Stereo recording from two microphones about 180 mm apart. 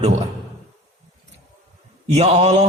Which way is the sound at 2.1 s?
35° right (ahead or behind).